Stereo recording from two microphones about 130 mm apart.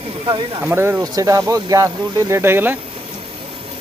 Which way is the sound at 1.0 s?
25° right (ahead or behind).